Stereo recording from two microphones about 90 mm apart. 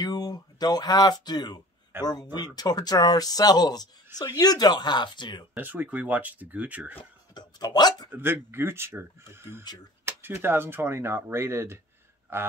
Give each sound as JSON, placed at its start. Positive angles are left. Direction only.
{"t": 0.0, "sound": "speech", "side_deg": 50}
{"t": 1.9, "sound": "speech", "side_deg": -25}
{"t": 2.3, "sound": "speech", "side_deg": 50}
{"t": 5.5, "sound": "speech", "side_deg": -20}
{"t": 7.3, "sound": "a sound", "side_deg": 50}
{"t": 8.1, "sound": "speech", "side_deg": -25}